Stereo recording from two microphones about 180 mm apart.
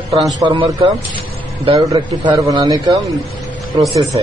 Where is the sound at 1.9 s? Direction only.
20° right (ahead or behind).